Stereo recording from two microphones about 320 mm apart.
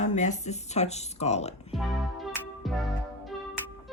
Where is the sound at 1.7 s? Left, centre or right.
Centre.